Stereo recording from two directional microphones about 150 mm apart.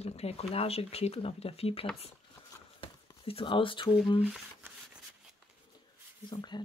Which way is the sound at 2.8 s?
35° left (ahead or behind).